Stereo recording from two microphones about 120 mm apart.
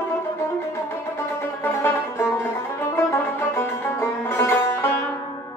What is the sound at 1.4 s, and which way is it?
Music, 20° left (ahead or behind).